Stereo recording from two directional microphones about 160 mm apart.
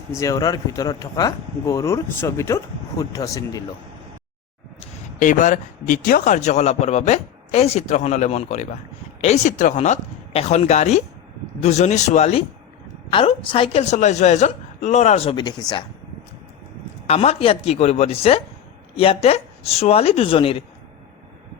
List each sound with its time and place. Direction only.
0.2 s speech: 20° left (ahead or behind)
5.2 s speech: 55° left (ahead or behind)
13.1 s speech: 35° left (ahead or behind)
17.1 s speech: 40° left (ahead or behind)